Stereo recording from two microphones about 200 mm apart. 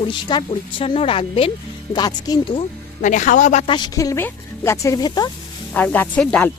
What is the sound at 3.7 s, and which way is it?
Speech, 20° left (ahead or behind).